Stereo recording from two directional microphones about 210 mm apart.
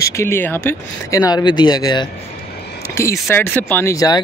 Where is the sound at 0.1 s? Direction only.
10° left (ahead or behind).